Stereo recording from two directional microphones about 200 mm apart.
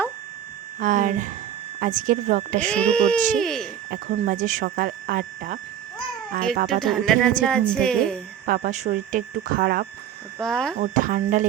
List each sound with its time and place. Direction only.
0.8 s speech: 40° right (ahead or behind)
2.6 s music: 5° left (ahead or behind)
3.9 s speech: 35° right (ahead or behind)
6.7 s music: centre (ahead or behind)
8.4 s speech: 40° right (ahead or behind)
10.4 s music: 5° left (ahead or behind)
10.8 s speech: 40° right (ahead or behind)